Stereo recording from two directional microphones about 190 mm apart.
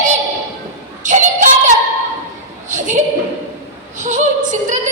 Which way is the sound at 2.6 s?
40° right (ahead or behind).